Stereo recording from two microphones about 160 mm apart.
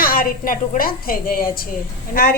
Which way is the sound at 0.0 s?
65° left (ahead or behind).